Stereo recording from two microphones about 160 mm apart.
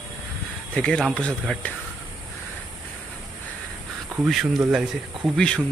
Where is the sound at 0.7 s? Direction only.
5° left (ahead or behind).